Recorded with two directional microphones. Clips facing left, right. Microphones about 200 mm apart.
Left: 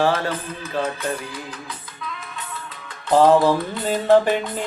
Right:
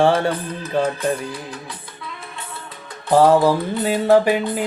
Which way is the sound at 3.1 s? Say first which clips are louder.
Right 1 dB; 10° right (ahead or behind).